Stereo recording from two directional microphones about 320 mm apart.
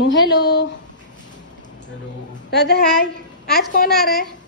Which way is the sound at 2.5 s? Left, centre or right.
Left.